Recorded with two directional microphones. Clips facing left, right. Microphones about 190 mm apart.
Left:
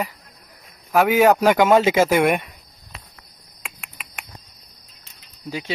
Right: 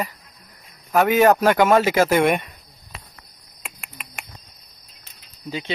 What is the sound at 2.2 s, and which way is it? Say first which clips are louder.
Speech: even; 5° left (ahead or behind).